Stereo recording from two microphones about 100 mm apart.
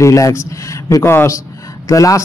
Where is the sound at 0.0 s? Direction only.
30° left (ahead or behind).